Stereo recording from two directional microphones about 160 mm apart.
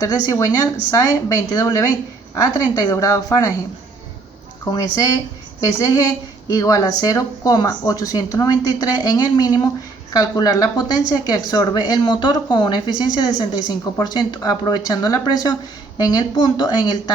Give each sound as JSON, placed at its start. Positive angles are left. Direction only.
{"t": 0.0, "sound": "a woman's voice", "side_deg": 20}
{"t": 1.5, "sound": "a woman's voice", "side_deg": 20}
{"t": 4.6, "sound": "a woman's voice", "side_deg": 20}